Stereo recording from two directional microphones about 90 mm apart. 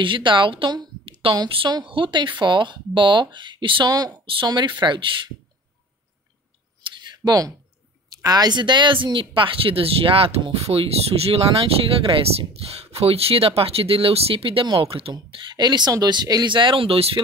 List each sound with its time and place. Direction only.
0.0 s a woman's voice: 65° right (ahead or behind)
1.2 s speech: 90° right
1.9 s speech: 65° right (ahead or behind)
3.9 s speech: 45° right (ahead or behind); by 5.3 s 65° right (ahead or behind)
6.8 s a sound: 55° right (ahead or behind)
8.1 s speech: 45° right (ahead or behind); by 15.1 s 90° right
15.1 s speech: 60° right (ahead or behind); by 17.2 s 90° right